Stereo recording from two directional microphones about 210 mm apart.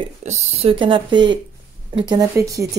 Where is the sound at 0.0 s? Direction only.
30° right (ahead or behind).